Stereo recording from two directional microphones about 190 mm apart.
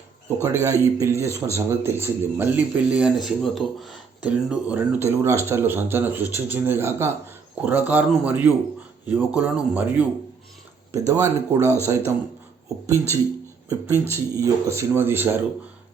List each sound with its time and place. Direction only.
0.6 s speech: 15° right (ahead or behind)